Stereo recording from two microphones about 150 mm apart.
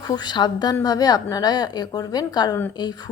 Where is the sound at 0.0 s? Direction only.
25° left (ahead or behind).